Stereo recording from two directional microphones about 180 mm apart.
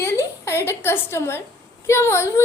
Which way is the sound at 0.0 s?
15° left (ahead or behind).